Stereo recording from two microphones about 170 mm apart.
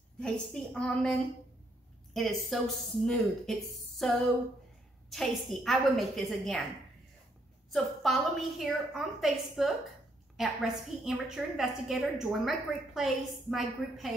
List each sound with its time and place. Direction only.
0.2 s a woman's voice: 5° left (ahead or behind)
2.1 s a woman's voice: centre (ahead or behind)
5.1 s a woman's voice: centre (ahead or behind)
7.7 s a woman's voice: centre (ahead or behind)